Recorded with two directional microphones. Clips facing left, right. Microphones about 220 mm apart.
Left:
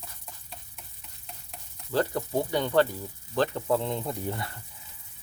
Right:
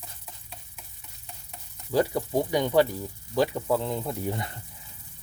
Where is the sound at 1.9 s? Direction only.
10° right (ahead or behind).